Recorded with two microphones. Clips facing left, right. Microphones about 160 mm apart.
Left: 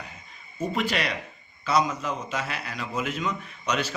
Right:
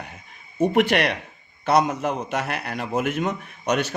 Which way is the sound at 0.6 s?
65° right (ahead or behind).